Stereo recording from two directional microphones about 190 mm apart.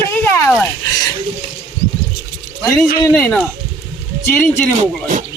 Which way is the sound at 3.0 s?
15° left (ahead or behind).